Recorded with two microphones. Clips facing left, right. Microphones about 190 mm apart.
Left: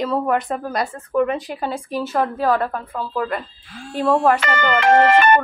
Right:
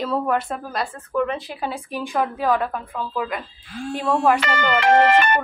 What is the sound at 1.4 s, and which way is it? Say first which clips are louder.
A woman's voice: left 3 dB; 10° right (ahead or behind).